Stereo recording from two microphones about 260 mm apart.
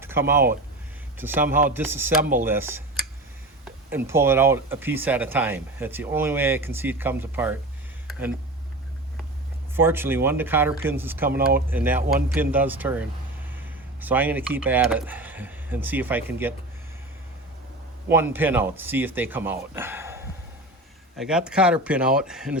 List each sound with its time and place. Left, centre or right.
0.0 s speech: centre
3.9 s speech: centre
9.7 s speech: centre
11.3 s speech: right
11.7 s speech: centre
18.1 s speech: centre